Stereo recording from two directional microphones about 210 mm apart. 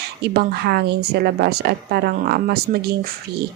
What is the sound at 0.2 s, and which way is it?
Speech, 50° right (ahead or behind).